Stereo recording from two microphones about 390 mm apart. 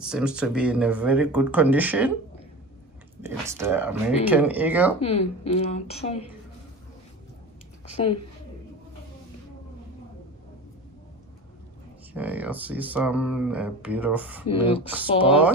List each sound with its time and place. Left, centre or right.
0.0 s speech: centre
3.2 s speech: centre
5.0 s speech: centre
12.1 s speech: centre